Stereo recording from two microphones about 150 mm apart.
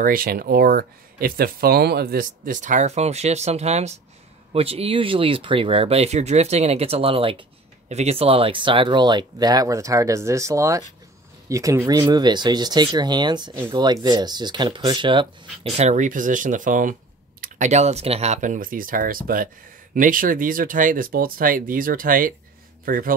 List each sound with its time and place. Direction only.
0.0 s speech: 75° right (ahead or behind); by 15.2 s 30° right (ahead or behind)
15.7 s speech: 50° right (ahead or behind); by 23.1 s 70° right (ahead or behind)